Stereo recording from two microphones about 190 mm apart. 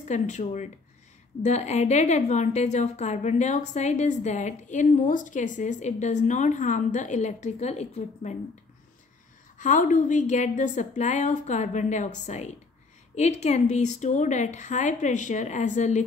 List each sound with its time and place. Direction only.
0.0 s a woman's voice: 40° left (ahead or behind)
9.6 s a woman's voice: 40° left (ahead or behind)